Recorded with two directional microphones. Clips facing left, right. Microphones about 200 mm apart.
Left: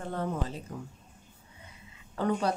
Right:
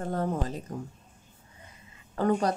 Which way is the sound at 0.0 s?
40° right (ahead or behind).